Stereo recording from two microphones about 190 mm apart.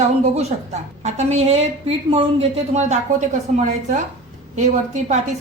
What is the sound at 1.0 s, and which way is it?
A woman's voice, 35° right (ahead or behind).